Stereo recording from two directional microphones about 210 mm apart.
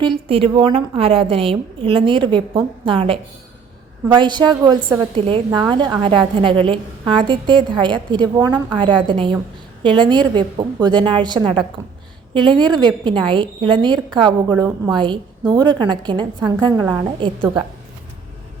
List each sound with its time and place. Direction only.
0.0 s a woman's voice: 25° right (ahead or behind)